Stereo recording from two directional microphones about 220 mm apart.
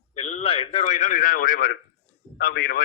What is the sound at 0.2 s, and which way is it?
A man's voice, 30° left (ahead or behind).